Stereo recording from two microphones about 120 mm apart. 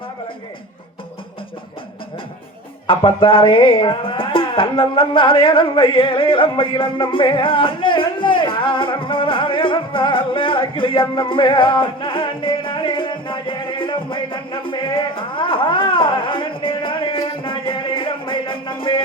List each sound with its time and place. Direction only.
2.8 s music: 45° left (ahead or behind)